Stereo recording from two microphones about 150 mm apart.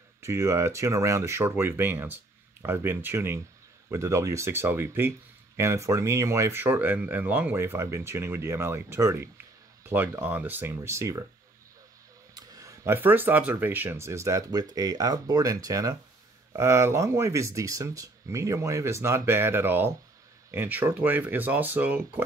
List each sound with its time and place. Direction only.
0.2 s speech: 20° right (ahead or behind)
12.4 s speech: 20° right (ahead or behind)